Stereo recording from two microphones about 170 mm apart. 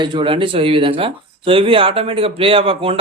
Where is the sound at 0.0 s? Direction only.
30° right (ahead or behind).